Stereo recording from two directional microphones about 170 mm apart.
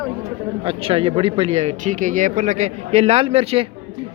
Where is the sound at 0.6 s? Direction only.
35° right (ahead or behind).